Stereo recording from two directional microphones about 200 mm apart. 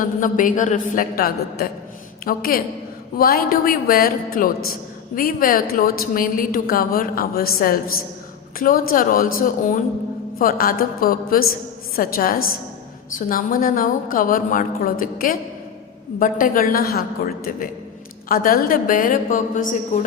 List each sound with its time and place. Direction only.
0.0 s a man's voice: 40° left (ahead or behind)